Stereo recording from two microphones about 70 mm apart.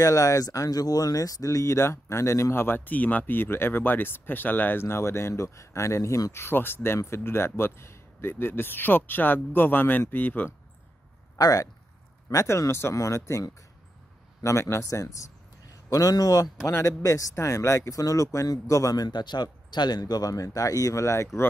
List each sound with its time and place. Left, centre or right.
0.0 s speech: left
6.4 s speech: left
11.3 s a man's voice: left
15.9 s a man's voice: left